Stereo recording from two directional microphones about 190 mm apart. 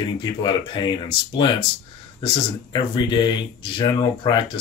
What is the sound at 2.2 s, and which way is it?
Speech, 25° left (ahead or behind).